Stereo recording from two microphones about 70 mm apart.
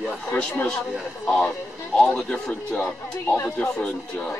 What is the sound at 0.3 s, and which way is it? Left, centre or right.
Speech, left.